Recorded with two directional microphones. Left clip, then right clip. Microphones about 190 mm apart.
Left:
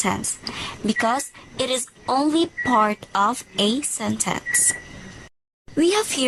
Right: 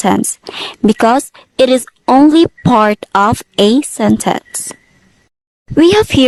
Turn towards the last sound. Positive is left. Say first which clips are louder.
# right 12 dB
turn(degrees=-45)  # may be behind; listen again after turning